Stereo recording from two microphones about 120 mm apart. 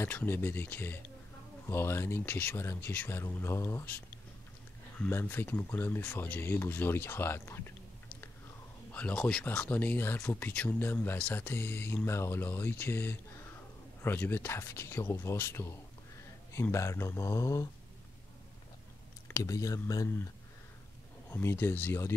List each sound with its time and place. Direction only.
0.0 s speech: 15° left (ahead or behind)
5.1 s speech: 15° left (ahead or behind)
8.9 s speech: 10° left (ahead or behind)
19.2 s speech: 25° left (ahead or behind)
21.3 s speech: 20° left (ahead or behind)